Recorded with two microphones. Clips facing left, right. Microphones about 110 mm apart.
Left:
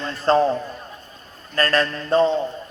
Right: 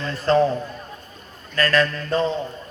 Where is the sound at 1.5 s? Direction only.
40° left (ahead or behind).